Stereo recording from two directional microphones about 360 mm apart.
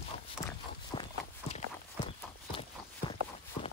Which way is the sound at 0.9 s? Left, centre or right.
Centre.